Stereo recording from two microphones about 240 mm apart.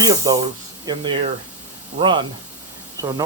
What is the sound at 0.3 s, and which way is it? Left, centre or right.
Speech, centre.